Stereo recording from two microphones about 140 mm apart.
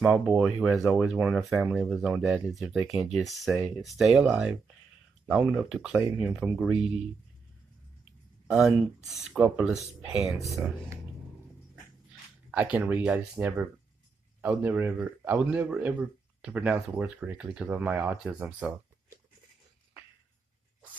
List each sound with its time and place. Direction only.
0.0 s speech: 5° right (ahead or behind)
3.5 s speech: 10° right (ahead or behind)
8.5 s speech: centre (ahead or behind)
10.5 s speech: 20° right (ahead or behind)
12.4 s speech: 10° right (ahead or behind)